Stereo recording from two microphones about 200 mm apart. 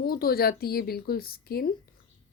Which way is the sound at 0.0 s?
50° left (ahead or behind).